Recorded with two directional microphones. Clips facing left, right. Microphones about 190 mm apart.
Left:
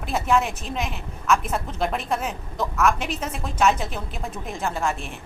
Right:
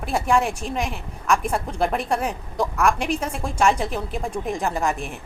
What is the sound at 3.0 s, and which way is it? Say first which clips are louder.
Speech: right 4 dB; 5° left (ahead or behind).